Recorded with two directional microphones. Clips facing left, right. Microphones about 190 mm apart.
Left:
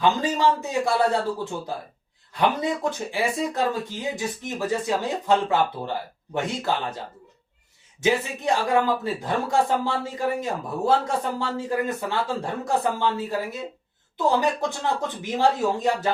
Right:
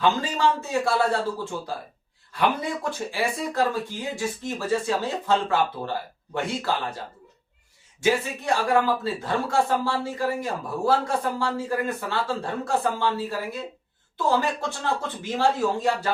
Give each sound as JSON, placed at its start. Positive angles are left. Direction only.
{"t": 0.0, "sound": "speech", "side_deg": 15}
{"t": 2.3, "sound": "a man's voice", "side_deg": 20}
{"t": 8.0, "sound": "a man's voice", "side_deg": 20}